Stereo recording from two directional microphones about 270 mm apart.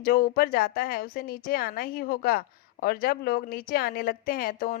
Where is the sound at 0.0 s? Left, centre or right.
Left.